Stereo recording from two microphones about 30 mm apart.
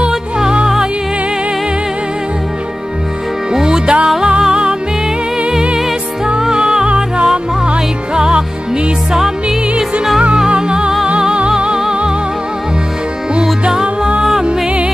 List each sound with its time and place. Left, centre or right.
3.6 s music: right
6.5 s music: right
10.5 s music: right
13.3 s music: right